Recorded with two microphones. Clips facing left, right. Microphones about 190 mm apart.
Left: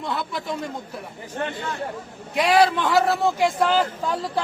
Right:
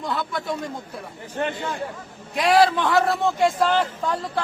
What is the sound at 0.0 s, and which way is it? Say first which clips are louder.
Speech: right 1 dB; centre (ahead or behind).